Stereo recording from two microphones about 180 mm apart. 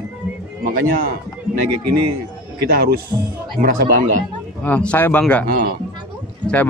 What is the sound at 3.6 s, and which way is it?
Speech, 50° right (ahead or behind).